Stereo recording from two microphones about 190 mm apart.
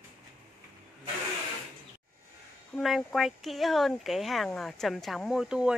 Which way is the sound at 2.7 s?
Centre (ahead or behind).